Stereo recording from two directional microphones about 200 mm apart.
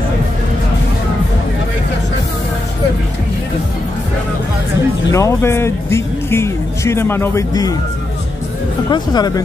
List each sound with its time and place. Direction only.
5.1 s speech: 15° left (ahead or behind)
8.9 s speech: 20° left (ahead or behind)